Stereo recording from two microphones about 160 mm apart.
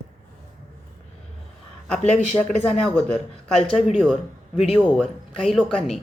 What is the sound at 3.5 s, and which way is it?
Speech, 5° left (ahead or behind).